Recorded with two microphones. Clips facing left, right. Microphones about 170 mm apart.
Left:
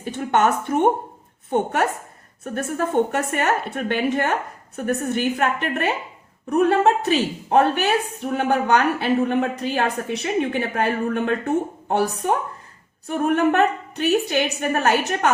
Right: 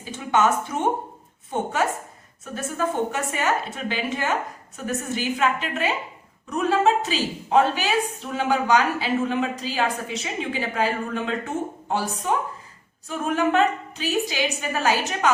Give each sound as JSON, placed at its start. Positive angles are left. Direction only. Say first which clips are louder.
{"t": 0.0, "sound": "a woman's voice", "louder": "left 2 dB", "side_deg": 60}